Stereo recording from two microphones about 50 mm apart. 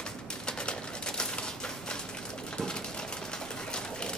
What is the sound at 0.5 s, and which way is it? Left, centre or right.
Pigeon, centre.